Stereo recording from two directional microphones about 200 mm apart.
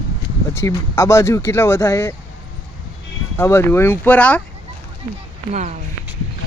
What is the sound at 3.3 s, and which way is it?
Speech, 15° left (ahead or behind).